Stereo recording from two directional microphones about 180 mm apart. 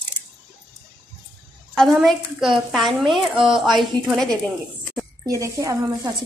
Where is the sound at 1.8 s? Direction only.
Centre (ahead or behind).